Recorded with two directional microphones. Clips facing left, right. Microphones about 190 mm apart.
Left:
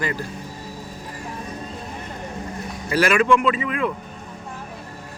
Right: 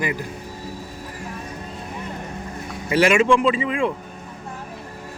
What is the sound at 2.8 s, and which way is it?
A man's voice, 20° right (ahead or behind).